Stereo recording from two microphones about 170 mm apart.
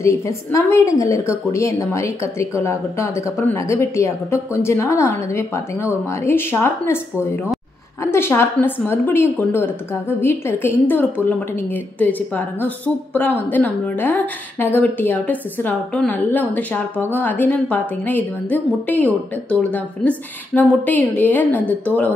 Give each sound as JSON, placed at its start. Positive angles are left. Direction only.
{"t": 0.0, "sound": "a woman's voice", "side_deg": 15}
{"t": 8.0, "sound": "a woman's voice", "side_deg": 15}